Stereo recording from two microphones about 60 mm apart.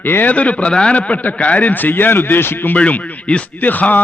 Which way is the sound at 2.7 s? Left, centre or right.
Left.